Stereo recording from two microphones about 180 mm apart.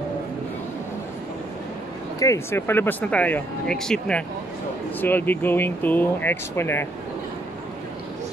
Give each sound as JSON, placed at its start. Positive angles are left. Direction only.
{"t": 2.1, "sound": "speech", "side_deg": 15}